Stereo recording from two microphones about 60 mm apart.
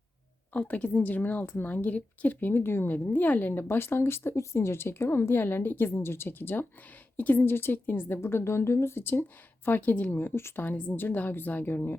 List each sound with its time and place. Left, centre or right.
0.5 s a woman's voice: left